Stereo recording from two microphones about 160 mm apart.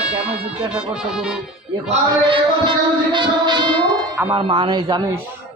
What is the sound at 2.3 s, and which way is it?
Music, 30° right (ahead or behind).